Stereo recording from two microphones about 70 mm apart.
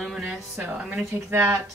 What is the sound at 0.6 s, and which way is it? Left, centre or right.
Speech, right.